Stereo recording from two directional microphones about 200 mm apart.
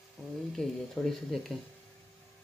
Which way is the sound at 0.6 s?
5° left (ahead or behind).